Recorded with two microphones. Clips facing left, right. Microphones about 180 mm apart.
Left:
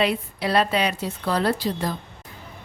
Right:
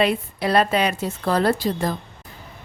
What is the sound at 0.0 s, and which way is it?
A woman's voice, 50° right (ahead or behind).